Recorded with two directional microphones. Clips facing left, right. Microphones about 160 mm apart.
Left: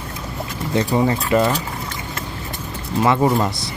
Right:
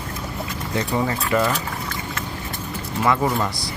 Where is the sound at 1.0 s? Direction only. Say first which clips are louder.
Left 3 dB; 25° left (ahead or behind).